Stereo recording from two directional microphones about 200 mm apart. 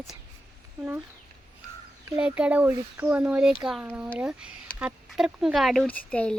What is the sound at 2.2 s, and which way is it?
Speech, 5° right (ahead or behind).